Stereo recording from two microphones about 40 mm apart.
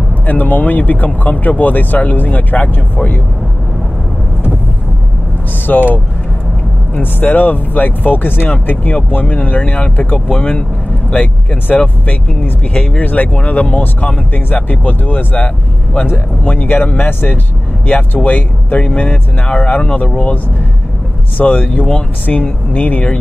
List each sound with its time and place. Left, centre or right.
0.3 s speech: left
5.7 s speech: left
7.0 s speech: left
10.3 s speech: left
14.3 s speech: left
17.8 s speech: left
21.5 s speech: left